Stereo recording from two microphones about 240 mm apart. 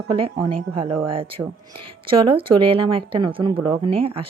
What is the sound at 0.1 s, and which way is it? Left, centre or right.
Speech, centre.